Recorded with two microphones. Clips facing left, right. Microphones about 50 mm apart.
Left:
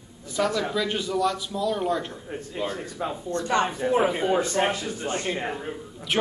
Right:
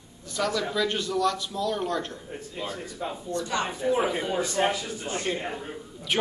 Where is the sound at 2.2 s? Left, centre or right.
Left.